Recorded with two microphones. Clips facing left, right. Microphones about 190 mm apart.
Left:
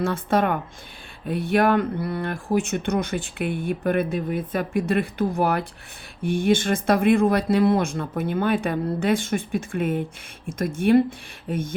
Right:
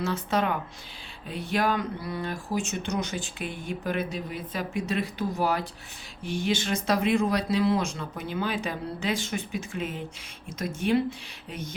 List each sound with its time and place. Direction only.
0.0 s speech: 55° left (ahead or behind)